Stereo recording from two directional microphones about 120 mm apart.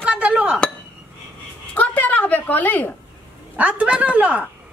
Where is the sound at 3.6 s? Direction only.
10° right (ahead or behind).